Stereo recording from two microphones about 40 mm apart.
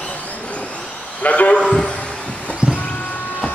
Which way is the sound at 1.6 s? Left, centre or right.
Left.